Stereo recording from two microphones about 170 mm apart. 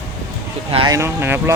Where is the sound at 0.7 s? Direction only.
35° right (ahead or behind).